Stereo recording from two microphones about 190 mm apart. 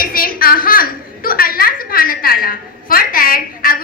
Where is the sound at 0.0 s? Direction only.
50° left (ahead or behind).